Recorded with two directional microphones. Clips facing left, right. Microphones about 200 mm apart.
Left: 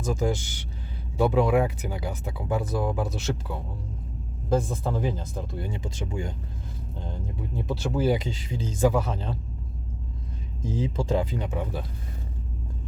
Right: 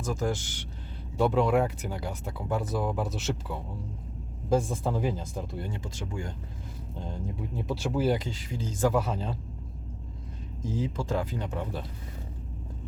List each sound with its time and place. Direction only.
0.0 s speech: 15° left (ahead or behind); by 5.6 s 5° right (ahead or behind)
5.6 s speech: 15° left (ahead or behind)
6.9 s speech: 5° right (ahead or behind)
8.1 s speech: 20° left (ahead or behind)
8.9 s speech: 5° right (ahead or behind)
10.7 s speech: 25° left (ahead or behind)
11.4 s speech: 10° left (ahead or behind)